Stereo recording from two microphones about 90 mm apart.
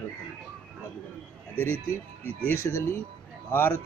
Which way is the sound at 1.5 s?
25° left (ahead or behind).